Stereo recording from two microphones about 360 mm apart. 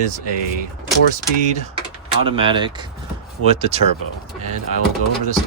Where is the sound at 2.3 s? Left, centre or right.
Centre.